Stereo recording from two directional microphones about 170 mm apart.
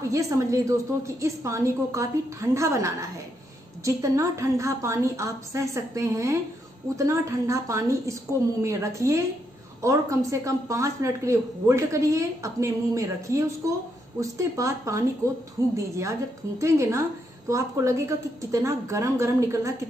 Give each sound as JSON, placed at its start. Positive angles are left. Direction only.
{"t": 0.1, "sound": "a woman's voice", "side_deg": -20}